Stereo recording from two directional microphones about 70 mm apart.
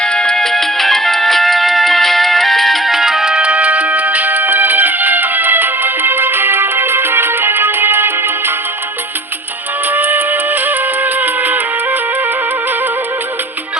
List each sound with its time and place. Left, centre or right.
0.0 s music: centre; by 8.5 s right
9.9 s music: right